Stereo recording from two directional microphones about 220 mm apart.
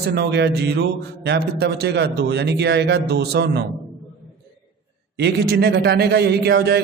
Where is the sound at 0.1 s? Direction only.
50° right (ahead or behind).